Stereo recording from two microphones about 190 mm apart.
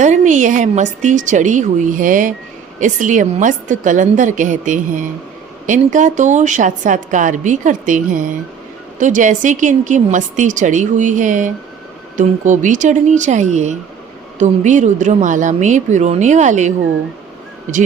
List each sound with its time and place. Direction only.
0.0 s a woman's voice: 40° right (ahead or behind)